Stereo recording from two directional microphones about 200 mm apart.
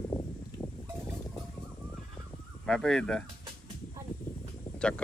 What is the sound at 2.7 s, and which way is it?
Speech, 5° left (ahead or behind).